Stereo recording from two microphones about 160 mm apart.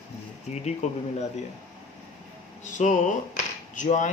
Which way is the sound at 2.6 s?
50° left (ahead or behind).